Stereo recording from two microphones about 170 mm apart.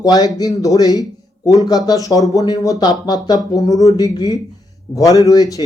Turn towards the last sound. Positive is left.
turn(degrees=20)  # may be behind; listen again after turning